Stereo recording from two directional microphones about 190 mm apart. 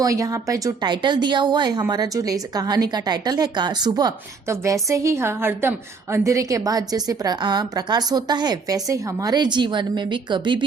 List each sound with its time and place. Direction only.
0.0 s speech: 15° right (ahead or behind)